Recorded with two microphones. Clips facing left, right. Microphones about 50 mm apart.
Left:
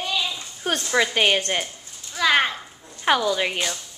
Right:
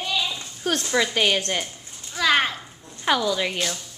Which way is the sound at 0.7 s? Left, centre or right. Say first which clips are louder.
Left 1 dB; centre.